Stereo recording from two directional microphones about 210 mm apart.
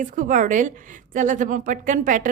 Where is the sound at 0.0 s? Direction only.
40° right (ahead or behind).